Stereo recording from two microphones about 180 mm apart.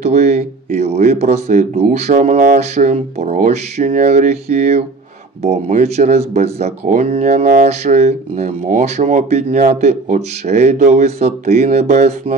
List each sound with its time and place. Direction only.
0.0 s speech: 40° right (ahead or behind)